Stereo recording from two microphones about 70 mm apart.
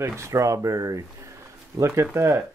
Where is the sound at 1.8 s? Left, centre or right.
Right.